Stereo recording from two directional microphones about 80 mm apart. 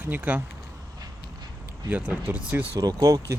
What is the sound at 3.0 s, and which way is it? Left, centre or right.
Speech, right.